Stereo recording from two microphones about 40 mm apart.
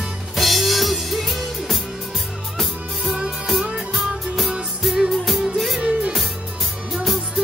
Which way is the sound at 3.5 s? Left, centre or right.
Centre.